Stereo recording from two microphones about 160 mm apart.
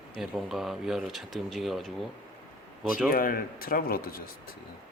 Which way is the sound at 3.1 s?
65° left (ahead or behind).